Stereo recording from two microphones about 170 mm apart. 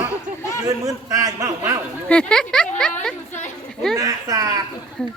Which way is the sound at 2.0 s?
5° left (ahead or behind).